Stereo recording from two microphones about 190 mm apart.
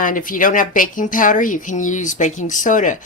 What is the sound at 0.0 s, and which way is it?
Speech, 45° left (ahead or behind).